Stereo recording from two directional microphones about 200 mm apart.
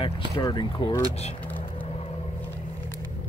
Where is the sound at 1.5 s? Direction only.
30° left (ahead or behind).